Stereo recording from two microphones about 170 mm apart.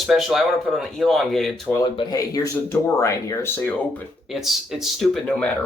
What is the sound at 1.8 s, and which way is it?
Speech, 25° left (ahead or behind).